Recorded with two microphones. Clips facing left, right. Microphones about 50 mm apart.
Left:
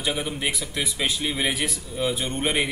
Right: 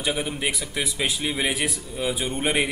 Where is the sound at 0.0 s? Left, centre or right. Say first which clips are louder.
Right 1 dB; centre.